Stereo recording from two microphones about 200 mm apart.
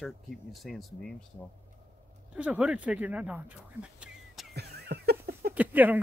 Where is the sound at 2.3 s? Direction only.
5° right (ahead or behind).